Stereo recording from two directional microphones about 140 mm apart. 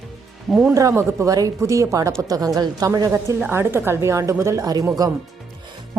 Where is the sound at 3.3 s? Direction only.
15° right (ahead or behind).